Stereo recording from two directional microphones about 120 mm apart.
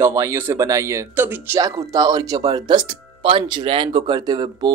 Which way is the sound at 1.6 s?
30° right (ahead or behind).